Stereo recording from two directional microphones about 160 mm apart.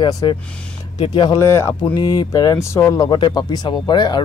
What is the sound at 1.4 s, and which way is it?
Speech, 15° left (ahead or behind).